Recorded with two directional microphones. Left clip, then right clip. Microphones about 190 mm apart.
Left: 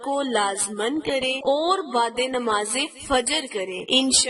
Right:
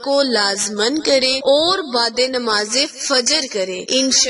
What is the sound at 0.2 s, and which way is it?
A woman's voice, 20° right (ahead or behind).